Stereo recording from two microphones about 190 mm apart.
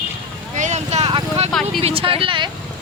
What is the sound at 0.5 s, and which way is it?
Vehicle, 40° right (ahead or behind).